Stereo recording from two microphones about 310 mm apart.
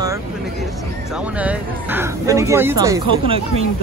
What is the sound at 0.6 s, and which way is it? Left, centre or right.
Speech, centre.